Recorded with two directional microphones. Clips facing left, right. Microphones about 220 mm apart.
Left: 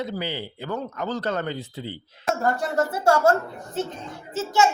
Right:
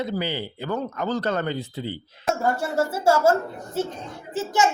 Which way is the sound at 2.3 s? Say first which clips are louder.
Even; 5° right (ahead or behind).